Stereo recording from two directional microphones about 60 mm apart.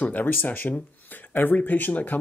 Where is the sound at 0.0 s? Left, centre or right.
Left.